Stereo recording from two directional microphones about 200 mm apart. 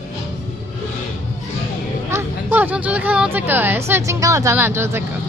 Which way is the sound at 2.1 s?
10° right (ahead or behind).